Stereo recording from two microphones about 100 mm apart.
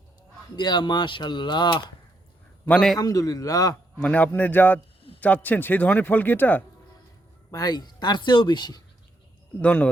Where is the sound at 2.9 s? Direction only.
40° left (ahead or behind).